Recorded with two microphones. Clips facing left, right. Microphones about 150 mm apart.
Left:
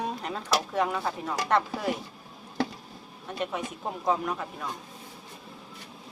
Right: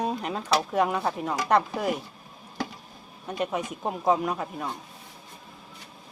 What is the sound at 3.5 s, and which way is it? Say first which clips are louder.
Speech: right 3 dB; 15° right (ahead or behind).